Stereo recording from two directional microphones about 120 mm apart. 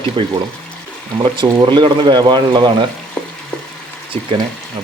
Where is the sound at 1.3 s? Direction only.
40° right (ahead or behind).